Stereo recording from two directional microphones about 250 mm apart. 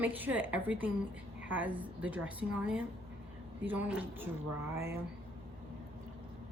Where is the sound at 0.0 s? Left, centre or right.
Centre.